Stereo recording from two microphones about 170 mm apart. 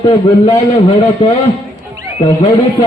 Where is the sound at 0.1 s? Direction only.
35° left (ahead or behind).